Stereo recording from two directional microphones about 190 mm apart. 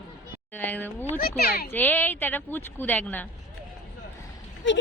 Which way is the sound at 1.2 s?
55° left (ahead or behind).